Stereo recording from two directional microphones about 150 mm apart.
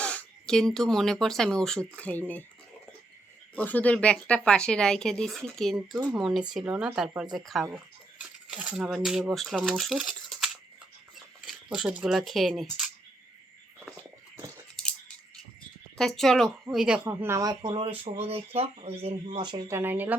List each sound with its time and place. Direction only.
0.0 s speech: 10° left (ahead or behind)
3.5 s speech: 10° left (ahead or behind)
16.0 s speech: centre (ahead or behind)
17.1 s speech: 15° right (ahead or behind); by 19.4 s 40° right (ahead or behind)
19.4 s speech: 25° right (ahead or behind)